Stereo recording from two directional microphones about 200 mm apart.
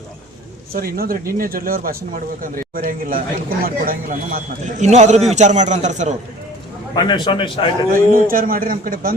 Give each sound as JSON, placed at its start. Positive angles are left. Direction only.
{"t": 0.7, "sound": "a man's voice", "side_deg": -45}
{"t": 6.9, "sound": "a man's voice", "side_deg": 25}
{"t": 7.9, "sound": "speech", "side_deg": -45}